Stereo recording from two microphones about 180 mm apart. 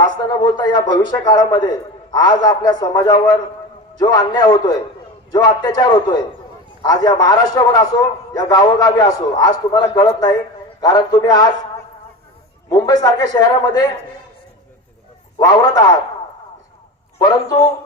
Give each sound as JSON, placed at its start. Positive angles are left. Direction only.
{"t": 0.0, "sound": "a man's voice", "side_deg": 20}
{"t": 12.7, "sound": "a man's voice", "side_deg": 20}
{"t": 15.4, "sound": "a man's voice", "side_deg": 20}
{"t": 17.2, "sound": "a man's voice", "side_deg": 20}